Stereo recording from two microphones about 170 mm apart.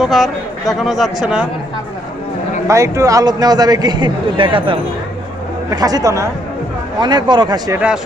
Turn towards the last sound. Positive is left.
turn(degrees=-25)  # may be behind; listen again after turning